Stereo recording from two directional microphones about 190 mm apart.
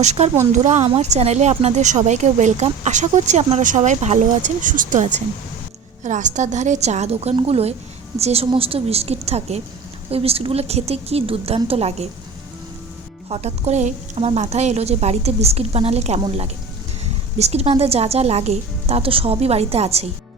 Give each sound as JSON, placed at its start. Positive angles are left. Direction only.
{"t": 0.0, "sound": "speech", "side_deg": -35}
{"t": 13.2, "sound": "speech", "side_deg": -35}